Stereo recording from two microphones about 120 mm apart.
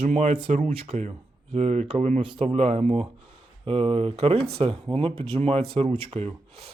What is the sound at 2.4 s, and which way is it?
Speech, 65° right (ahead or behind).